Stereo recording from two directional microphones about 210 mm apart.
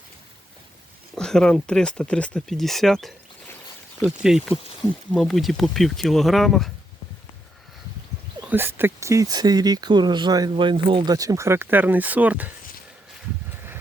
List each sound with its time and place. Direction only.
1.1 s speech: 5° left (ahead or behind)
4.2 s speech: centre (ahead or behind)
8.4 s speech: 10° right (ahead or behind)